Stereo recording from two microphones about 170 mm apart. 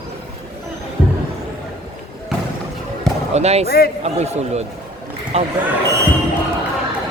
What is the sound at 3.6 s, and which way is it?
Speech, 65° left (ahead or behind).